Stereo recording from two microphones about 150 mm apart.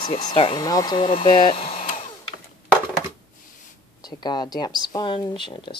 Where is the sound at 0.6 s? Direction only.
25° left (ahead or behind); by 1.8 s 40° left (ahead or behind).